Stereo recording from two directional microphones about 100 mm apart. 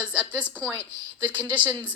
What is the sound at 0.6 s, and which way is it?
Speech, 15° left (ahead or behind).